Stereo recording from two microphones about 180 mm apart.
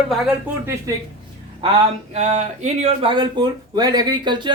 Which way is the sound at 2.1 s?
40° right (ahead or behind).